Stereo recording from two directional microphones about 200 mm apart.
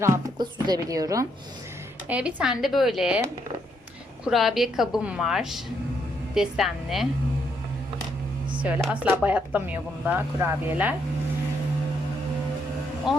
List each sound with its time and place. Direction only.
0.0 s speech: 15° right (ahead or behind)
2.0 s a woman's voice: 5° right (ahead or behind)
4.2 s a woman's voice: centre (ahead or behind)
8.6 s speech: 5° right (ahead or behind)
13.1 s speech: centre (ahead or behind)